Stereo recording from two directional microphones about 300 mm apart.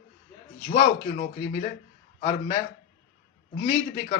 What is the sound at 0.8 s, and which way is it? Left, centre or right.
Speech, centre.